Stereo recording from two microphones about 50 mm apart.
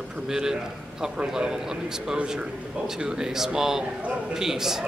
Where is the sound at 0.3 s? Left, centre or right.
Centre.